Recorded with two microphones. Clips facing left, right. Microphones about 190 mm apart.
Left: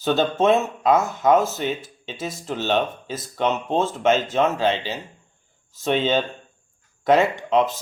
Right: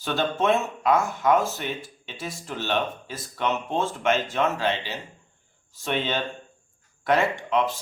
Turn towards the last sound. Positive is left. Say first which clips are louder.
# left 4 dB
turn(degrees=25)  # may be behind; listen again after turning